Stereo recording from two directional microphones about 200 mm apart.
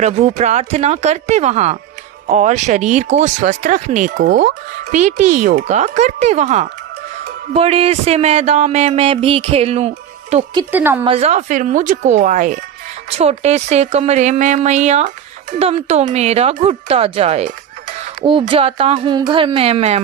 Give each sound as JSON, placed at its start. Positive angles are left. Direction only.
{"t": 0.0, "sound": "speech", "side_deg": -35}
{"t": 10.7, "sound": "a woman's voice", "side_deg": -10}
{"t": 11.0, "sound": "speech", "side_deg": -30}